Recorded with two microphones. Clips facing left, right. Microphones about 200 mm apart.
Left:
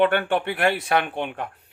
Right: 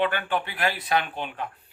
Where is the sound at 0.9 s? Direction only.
55° left (ahead or behind).